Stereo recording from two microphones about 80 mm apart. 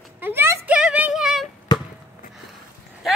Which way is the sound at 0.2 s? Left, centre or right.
Right.